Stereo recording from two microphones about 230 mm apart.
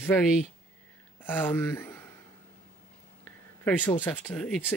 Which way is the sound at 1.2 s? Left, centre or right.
Centre.